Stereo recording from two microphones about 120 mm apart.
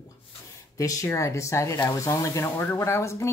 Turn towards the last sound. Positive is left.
turn(degrees=20)  # may be behind; listen again after turning